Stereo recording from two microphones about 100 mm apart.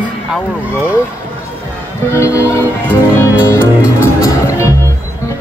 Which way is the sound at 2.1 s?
20° right (ahead or behind).